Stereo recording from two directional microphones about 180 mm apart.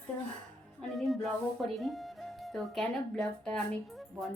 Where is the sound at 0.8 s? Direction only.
Centre (ahead or behind).